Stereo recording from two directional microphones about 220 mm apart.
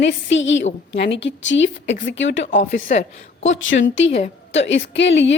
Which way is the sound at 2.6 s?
35° left (ahead or behind).